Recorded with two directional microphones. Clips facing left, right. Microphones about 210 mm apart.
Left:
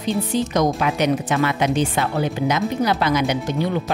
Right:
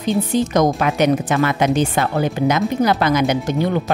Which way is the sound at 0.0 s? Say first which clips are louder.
Right 3 dB; 50° right (ahead or behind).